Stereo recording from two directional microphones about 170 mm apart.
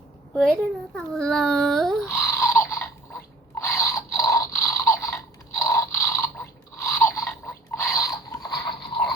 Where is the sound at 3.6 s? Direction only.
15° left (ahead or behind).